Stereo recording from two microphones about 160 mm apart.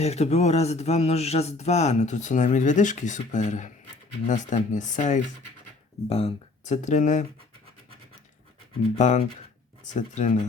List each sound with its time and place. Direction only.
0.0 s speech: 40° left (ahead or behind)
6.1 s speech: 40° left (ahead or behind)
9.0 s speech: 50° left (ahead or behind)